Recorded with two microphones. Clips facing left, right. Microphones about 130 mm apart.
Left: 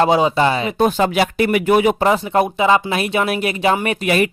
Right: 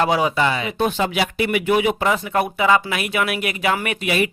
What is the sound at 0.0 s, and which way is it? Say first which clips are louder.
Speech: left 4 dB; 25° left (ahead or behind).